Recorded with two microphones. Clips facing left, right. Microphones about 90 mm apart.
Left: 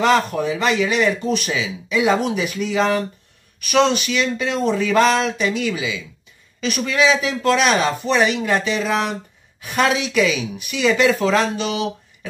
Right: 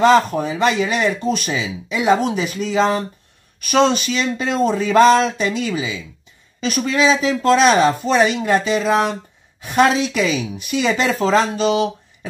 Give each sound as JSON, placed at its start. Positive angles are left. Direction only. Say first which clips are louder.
{"t": 0.0, "sound": "speech", "louder": "right 3 dB", "side_deg": -35}